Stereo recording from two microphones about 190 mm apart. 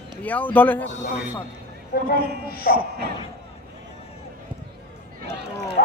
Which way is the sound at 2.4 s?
50° left (ahead or behind).